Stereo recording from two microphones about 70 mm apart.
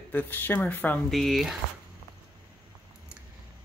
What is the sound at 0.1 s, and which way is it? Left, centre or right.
Speech, left.